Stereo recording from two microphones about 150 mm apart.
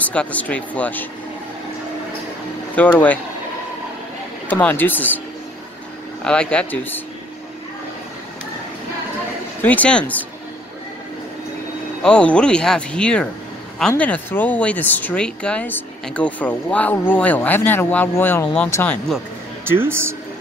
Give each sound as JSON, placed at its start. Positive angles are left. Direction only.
{"t": 0.0, "sound": "speech", "side_deg": 10}
{"t": 2.8, "sound": "speech", "side_deg": 10}
{"t": 4.5, "sound": "speech", "side_deg": 10}
{"t": 6.2, "sound": "speech", "side_deg": 5}
{"t": 9.6, "sound": "speech", "side_deg": 10}
{"t": 12.0, "sound": "speech", "side_deg": 5}
{"t": 19.7, "sound": "speech", "side_deg": -15}